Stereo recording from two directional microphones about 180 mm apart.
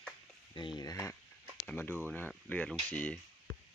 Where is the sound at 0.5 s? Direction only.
25° left (ahead or behind).